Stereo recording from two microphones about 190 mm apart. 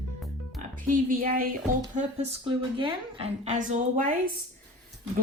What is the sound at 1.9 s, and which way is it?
A woman's voice, 30° right (ahead or behind).